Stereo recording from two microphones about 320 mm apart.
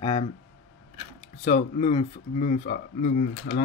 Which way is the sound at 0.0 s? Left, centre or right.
Centre.